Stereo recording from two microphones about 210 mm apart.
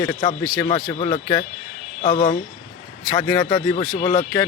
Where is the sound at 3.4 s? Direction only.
20° left (ahead or behind).